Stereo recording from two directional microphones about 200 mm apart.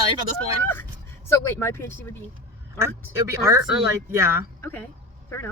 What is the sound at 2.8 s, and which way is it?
Speech, 15° right (ahead or behind).